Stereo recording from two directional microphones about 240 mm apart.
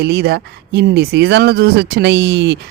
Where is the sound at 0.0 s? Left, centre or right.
Right.